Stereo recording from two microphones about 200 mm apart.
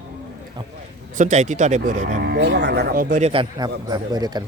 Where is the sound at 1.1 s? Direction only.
35° right (ahead or behind).